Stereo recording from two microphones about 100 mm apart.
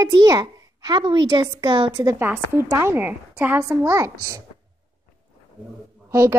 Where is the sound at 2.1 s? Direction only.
20° right (ahead or behind).